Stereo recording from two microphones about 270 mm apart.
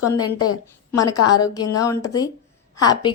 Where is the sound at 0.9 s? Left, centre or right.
Centre.